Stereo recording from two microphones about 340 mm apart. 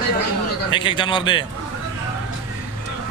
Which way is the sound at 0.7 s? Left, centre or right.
Centre.